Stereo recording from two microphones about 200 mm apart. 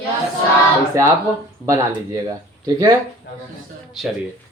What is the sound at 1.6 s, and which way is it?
Speech, 15° right (ahead or behind).